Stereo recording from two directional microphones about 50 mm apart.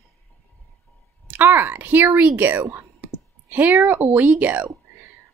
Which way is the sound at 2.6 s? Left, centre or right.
Right.